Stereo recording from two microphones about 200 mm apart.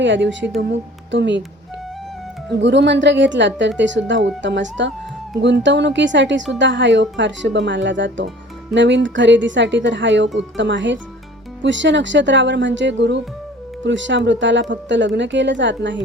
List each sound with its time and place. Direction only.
0.0 s speech: 65° right (ahead or behind)
2.6 s speech: 60° right (ahead or behind)